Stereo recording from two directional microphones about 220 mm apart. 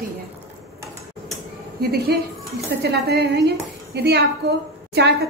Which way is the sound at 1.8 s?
45° right (ahead or behind).